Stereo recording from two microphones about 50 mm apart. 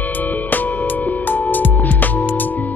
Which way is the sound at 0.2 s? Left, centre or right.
Left.